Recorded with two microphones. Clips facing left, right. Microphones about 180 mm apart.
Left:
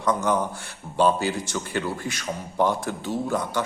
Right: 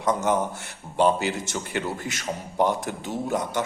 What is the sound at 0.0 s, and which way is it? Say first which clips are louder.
A man's voice: even; 20° right (ahead or behind).